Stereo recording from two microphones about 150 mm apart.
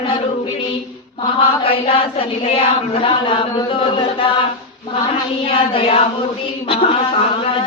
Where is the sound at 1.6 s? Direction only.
35° left (ahead or behind).